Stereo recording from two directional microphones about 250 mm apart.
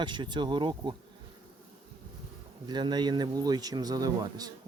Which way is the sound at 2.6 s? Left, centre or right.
Centre.